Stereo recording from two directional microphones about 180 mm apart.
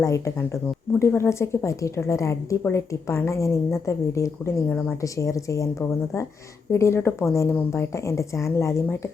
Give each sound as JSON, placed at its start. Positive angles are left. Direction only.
{"t": 0.0, "sound": "a woman's voice", "side_deg": 15}
{"t": 6.7, "sound": "a woman's voice", "side_deg": 15}